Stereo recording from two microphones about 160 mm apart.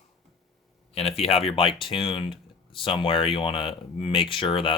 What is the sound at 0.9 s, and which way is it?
Speech, 40° left (ahead or behind).